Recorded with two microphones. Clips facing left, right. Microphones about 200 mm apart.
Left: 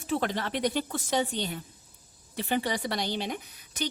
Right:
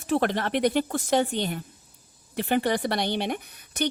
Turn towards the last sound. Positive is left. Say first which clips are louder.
# right 6 dB
turn(degrees=-60)  # may be behind; listen again after turning